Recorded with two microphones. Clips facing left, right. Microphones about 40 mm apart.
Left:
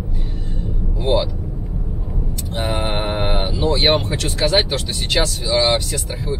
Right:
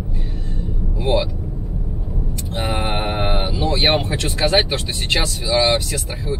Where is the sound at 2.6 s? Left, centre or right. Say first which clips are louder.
Even; centre.